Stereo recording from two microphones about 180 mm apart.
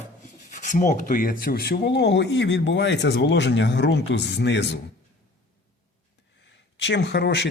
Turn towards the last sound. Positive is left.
turn(degrees=80)